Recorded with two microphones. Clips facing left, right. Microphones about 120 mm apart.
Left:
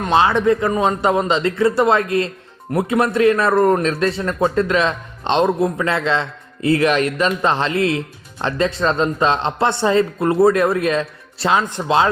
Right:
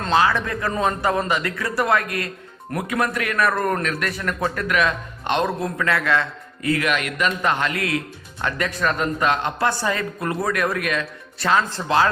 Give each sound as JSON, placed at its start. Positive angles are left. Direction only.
{"t": 0.0, "sound": "speech", "side_deg": 25}